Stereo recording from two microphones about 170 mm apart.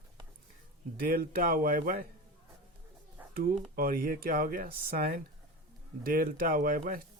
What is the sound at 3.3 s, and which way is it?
Speech, 55° right (ahead or behind).